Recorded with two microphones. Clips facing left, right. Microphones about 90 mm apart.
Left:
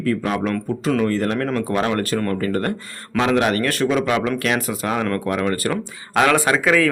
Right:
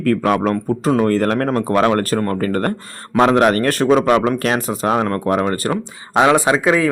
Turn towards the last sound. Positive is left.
turn(degrees=-25)  # may be behind; listen again after turning